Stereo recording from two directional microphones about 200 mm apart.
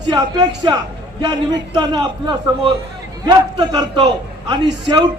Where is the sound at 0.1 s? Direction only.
20° right (ahead or behind).